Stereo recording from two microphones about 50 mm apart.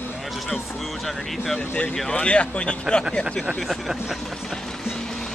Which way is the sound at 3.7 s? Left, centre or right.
Centre.